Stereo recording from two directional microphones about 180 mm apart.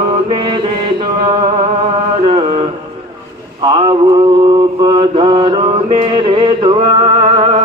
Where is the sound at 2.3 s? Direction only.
30° right (ahead or behind).